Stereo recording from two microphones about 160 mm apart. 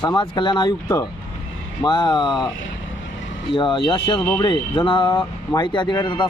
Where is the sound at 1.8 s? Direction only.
30° left (ahead or behind).